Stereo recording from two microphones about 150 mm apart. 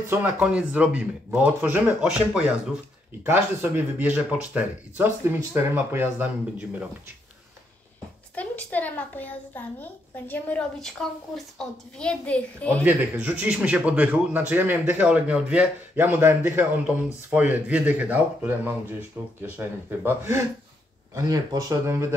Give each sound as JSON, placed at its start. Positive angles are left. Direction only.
{"t": 0.1, "sound": "speech", "side_deg": -10}
{"t": 8.4, "sound": "a child's voice", "side_deg": 10}
{"t": 12.8, "sound": "speech", "side_deg": -10}